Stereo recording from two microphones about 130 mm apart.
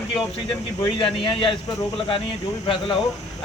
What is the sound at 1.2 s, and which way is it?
Speech, 40° left (ahead or behind).